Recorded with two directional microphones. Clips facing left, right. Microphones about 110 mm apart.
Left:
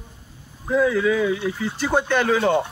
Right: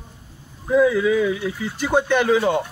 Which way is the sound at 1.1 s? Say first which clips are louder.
Right 1 dB; 25° left (ahead or behind).